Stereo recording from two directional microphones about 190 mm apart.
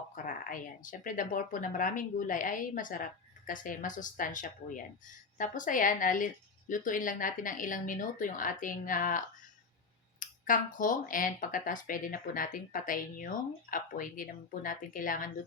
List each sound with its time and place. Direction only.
0.3 s speech: 45° left (ahead or behind)